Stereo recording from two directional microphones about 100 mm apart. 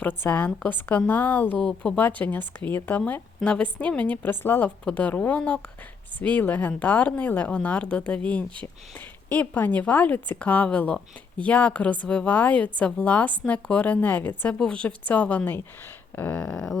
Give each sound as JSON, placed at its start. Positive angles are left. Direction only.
{"t": 0.0, "sound": "a woman's voice", "side_deg": 20}